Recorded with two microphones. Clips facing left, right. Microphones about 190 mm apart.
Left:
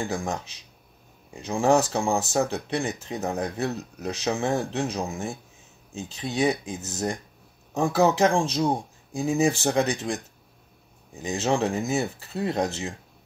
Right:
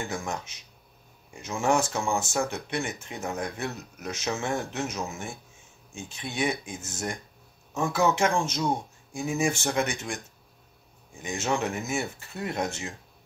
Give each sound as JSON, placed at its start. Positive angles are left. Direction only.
{"t": 0.0, "sound": "speech", "side_deg": 35}